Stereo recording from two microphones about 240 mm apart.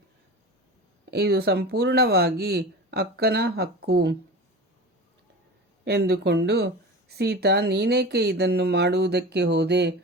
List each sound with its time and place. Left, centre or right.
1.1 s speech: right
5.8 s speech: right